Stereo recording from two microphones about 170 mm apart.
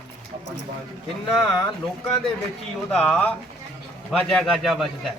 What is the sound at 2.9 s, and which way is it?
Speech, 10° left (ahead or behind).